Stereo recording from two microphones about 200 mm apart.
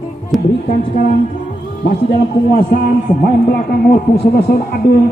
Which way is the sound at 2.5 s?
50° left (ahead or behind).